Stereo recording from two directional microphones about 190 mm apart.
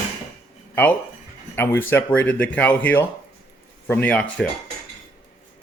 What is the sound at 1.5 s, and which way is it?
Speech, 10° left (ahead or behind).